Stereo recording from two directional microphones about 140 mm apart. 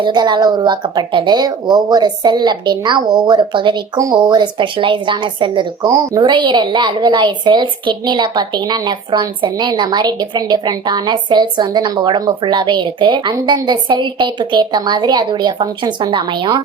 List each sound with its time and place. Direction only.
0.0 s a woman's voice: 30° right (ahead or behind)
5.9 s a woman's voice: 25° right (ahead or behind)